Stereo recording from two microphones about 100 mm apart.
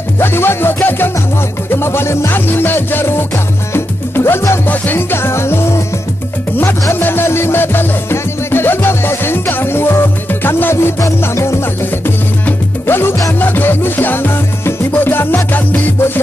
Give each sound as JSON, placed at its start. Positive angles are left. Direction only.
{"t": 0.2, "sound": "music", "side_deg": 25}